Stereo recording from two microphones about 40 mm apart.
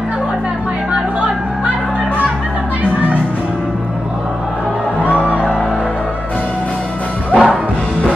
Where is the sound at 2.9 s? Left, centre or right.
Left.